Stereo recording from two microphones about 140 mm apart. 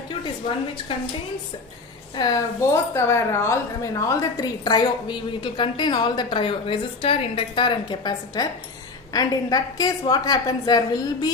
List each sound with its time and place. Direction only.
2.1 s a woman's voice: 25° left (ahead or behind)